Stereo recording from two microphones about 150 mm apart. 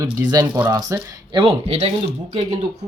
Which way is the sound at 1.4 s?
40° right (ahead or behind).